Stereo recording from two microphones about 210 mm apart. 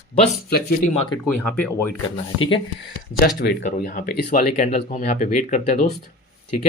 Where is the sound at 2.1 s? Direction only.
25° left (ahead or behind).